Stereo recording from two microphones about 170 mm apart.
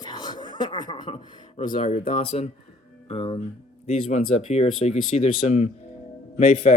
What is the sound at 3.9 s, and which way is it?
Speech, 40° left (ahead or behind).